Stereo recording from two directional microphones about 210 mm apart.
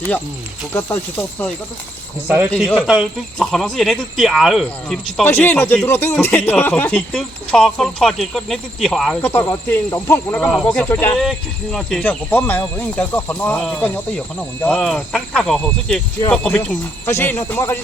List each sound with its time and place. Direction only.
0.7 s speech: 10° left (ahead or behind)
2.2 s speech: 10° right (ahead or behind)
2.5 s speech: 5° left (ahead or behind)
9.2 s speech: 10° left (ahead or behind)